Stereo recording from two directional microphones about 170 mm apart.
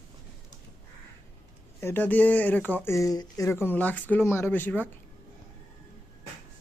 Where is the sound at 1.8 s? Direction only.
10° left (ahead or behind).